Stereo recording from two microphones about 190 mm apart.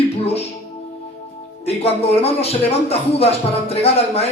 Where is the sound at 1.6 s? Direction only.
35° left (ahead or behind).